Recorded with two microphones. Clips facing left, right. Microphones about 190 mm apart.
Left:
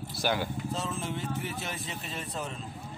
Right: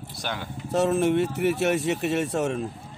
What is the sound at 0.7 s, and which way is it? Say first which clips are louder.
Speech: right 13 dB; 70° right (ahead or behind).